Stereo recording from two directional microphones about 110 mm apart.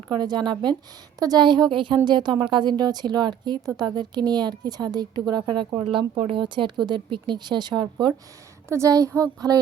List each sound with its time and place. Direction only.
0.1 s a woman's voice: 40° right (ahead or behind)
8.7 s a woman's voice: 30° right (ahead or behind)